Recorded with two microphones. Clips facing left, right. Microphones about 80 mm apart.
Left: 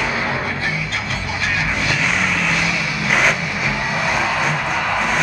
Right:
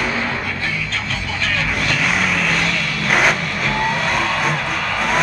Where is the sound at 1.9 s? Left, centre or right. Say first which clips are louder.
Right 2 dB; centre.